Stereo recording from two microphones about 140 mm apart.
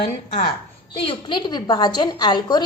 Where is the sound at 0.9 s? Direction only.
40° left (ahead or behind).